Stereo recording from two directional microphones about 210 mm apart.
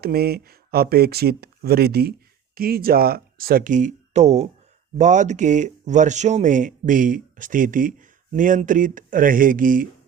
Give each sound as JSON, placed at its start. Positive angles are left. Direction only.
{"t": 0.0, "sound": "speech", "side_deg": -45}